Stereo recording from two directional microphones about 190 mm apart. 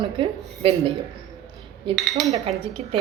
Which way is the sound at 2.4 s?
30° right (ahead or behind).